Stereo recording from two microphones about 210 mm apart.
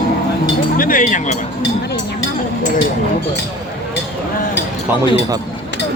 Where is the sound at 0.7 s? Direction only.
40° left (ahead or behind).